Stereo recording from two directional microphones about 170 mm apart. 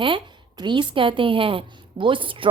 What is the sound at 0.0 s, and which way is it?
A woman's voice, 30° right (ahead or behind).